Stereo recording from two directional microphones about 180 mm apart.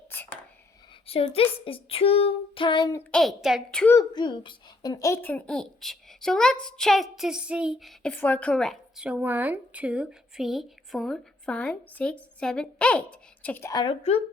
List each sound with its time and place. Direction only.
0.1 s whispering: 10° left (ahead or behind)
1.0 s a sound: 30° left (ahead or behind)
3.0 s a child's voice: 5° left (ahead or behind)
3.9 s a child's voice: 25° left (ahead or behind)